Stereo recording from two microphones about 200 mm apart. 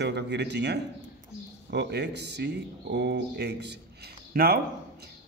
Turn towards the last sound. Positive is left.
turn(degrees=-50)  # may be behind; listen again after turning